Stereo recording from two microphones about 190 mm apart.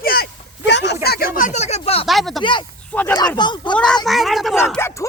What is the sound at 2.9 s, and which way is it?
Speech, 10° left (ahead or behind).